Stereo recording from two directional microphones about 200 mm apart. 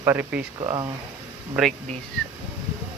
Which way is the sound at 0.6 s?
25° right (ahead or behind).